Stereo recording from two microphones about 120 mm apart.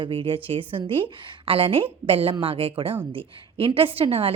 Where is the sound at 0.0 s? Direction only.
45° right (ahead or behind).